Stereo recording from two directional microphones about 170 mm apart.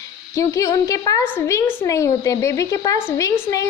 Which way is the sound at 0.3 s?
20° left (ahead or behind).